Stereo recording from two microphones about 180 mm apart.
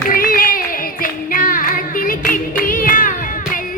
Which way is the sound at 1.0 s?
50° left (ahead or behind).